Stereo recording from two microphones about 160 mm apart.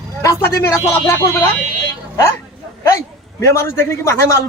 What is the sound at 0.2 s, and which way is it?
A woman's voice, 20° left (ahead or behind).